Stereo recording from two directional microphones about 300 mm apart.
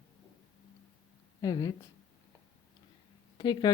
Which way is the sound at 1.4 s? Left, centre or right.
Centre.